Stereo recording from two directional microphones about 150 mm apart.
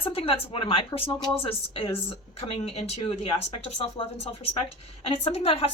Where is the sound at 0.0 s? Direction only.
40° left (ahead or behind).